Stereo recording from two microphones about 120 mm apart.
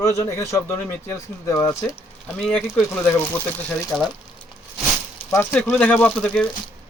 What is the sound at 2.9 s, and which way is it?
Speech, 20° left (ahead or behind).